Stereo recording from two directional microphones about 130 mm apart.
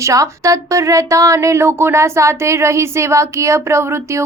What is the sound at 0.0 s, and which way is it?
Speech, 25° right (ahead or behind).